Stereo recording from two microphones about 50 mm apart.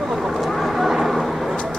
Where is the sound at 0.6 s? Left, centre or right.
Centre.